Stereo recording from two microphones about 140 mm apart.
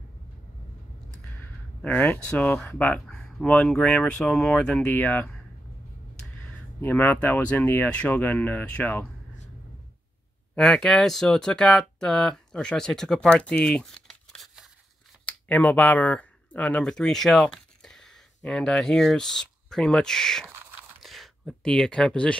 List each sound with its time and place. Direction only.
1.4 s speech: 10° left (ahead or behind)
6.8 s speech: 15° left (ahead or behind)
10.5 s speech: 5° left (ahead or behind)
15.2 s speech: 10° left (ahead or behind)
20.4 s a sound: 15° right (ahead or behind)
21.0 s a sound: centre (ahead or behind)